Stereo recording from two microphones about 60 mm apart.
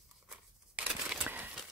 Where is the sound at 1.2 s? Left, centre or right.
Right.